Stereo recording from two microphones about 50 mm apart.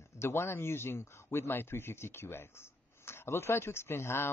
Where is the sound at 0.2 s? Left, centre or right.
Left.